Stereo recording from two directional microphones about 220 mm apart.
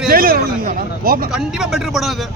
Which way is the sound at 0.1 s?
40° right (ahead or behind).